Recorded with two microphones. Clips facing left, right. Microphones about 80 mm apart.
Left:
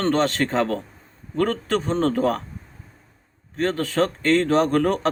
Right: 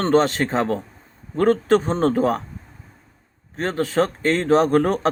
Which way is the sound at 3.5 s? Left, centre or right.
Right.